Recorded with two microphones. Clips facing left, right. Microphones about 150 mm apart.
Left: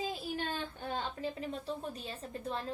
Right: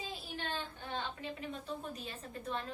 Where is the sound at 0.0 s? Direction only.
40° left (ahead or behind).